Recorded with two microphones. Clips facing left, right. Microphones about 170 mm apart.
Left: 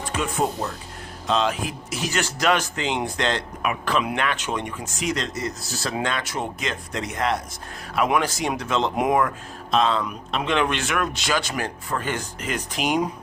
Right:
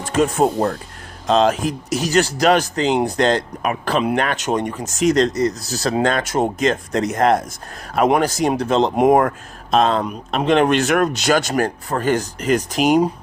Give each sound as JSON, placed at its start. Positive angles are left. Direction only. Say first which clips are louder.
{"t": 0.1, "sound": "speech", "louder": "right 9 dB", "side_deg": -45}